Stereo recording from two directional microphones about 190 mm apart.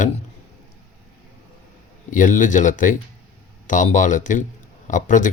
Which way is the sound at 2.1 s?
40° left (ahead or behind).